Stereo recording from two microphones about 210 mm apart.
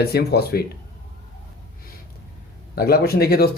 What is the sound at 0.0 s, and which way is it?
Speech, 50° left (ahead or behind).